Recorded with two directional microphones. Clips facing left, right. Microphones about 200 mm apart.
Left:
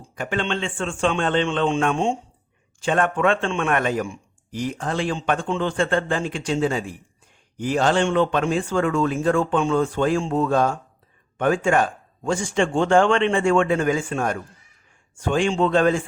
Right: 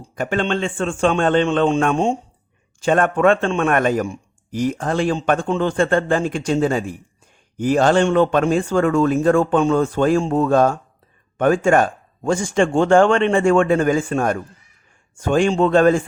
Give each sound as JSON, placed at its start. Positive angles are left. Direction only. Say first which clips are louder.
{"t": 0.2, "sound": "a man's voice", "louder": "right 5 dB", "side_deg": -45}